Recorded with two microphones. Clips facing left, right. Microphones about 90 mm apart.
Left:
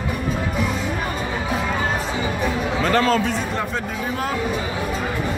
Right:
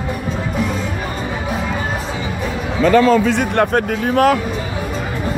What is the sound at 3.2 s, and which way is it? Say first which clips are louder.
Speech: right 8 dB; 70° right (ahead or behind).